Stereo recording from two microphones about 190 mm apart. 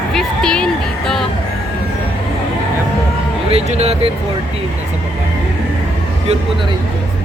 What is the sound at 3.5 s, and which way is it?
Speech, 30° right (ahead or behind).